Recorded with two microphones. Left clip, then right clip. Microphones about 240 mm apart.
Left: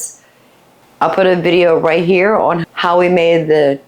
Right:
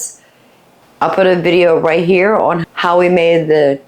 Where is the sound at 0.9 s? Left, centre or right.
Left.